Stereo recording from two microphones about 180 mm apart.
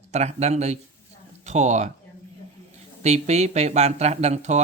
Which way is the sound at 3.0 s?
40° right (ahead or behind).